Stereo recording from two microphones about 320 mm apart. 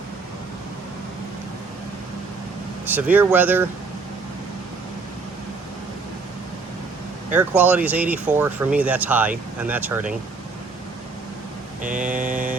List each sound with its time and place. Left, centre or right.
2.8 s speech: centre
7.3 s speech: centre
11.8 s mantra: right